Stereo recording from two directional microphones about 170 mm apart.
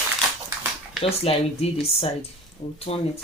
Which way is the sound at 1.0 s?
35° left (ahead or behind).